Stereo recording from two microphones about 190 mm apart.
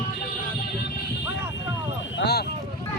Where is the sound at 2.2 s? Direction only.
60° left (ahead or behind).